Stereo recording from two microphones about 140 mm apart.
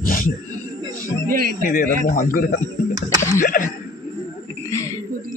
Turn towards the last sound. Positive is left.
turn(degrees=70)  # may be behind; listen again after turning